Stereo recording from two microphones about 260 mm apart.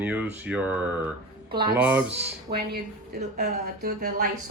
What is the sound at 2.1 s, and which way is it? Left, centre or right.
A woman's voice, right.